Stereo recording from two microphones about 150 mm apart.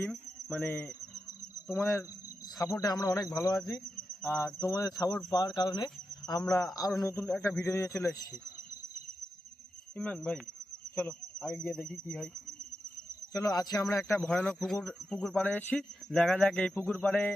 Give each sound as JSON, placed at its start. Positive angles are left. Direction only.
{"t": 0.5, "sound": "speech", "side_deg": 5}
{"t": 1.8, "sound": "speech", "side_deg": 20}
{"t": 9.9, "sound": "speech", "side_deg": 10}
{"t": 10.9, "sound": "a sound", "side_deg": 5}
{"t": 11.6, "sound": "speech", "side_deg": 5}
{"t": 13.3, "sound": "speech", "side_deg": 25}
{"t": 14.2, "sound": "speech", "side_deg": 5}